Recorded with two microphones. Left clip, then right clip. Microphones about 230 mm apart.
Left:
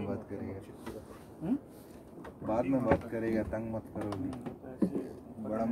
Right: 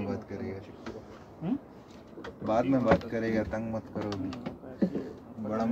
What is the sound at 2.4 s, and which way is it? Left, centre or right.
Speech, right.